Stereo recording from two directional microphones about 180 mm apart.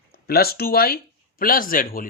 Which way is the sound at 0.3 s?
60° left (ahead or behind).